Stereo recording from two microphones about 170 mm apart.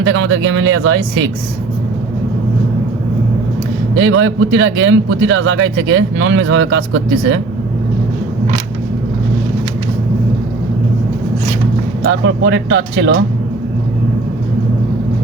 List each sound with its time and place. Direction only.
0.0 s a man's voice: 90° right
3.9 s a man's voice: 90° right
12.0 s a man's voice: 90° right